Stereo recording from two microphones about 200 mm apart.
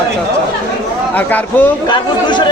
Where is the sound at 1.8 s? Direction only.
20° left (ahead or behind).